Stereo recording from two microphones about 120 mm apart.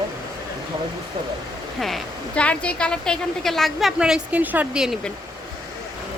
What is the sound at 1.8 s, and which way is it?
A woman's voice, centre (ahead or behind).